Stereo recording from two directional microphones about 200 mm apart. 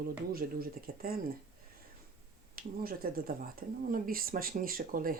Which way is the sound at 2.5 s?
45° right (ahead or behind).